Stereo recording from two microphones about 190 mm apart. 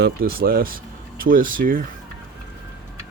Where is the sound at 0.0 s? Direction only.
50° right (ahead or behind).